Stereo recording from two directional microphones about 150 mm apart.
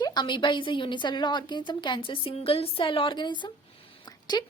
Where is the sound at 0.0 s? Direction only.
30° left (ahead or behind).